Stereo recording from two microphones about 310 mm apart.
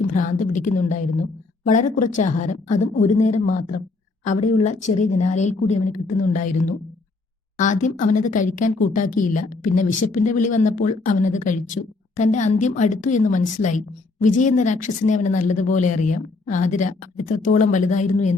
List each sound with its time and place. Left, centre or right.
0.1 s a woman's voice: left
7.6 s a woman's voice: left